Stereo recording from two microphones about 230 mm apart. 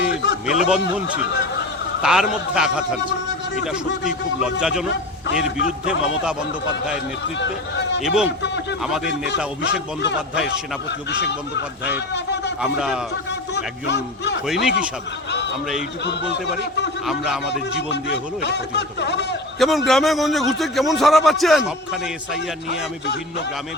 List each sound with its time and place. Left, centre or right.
0.5 s speech: centre
4.0 s speech: centre
8.0 s speech: centre
9.0 s a man's voice: left
12.6 s speech: centre
13.8 s a man's voice: left
14.4 s speech: centre
16.0 s a man's voice: left
17.1 s speech: centre
17.5 s a man's voice: left
19.5 s a man's voice: centre